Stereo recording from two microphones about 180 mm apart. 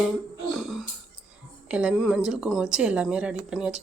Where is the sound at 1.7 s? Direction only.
5° right (ahead or behind).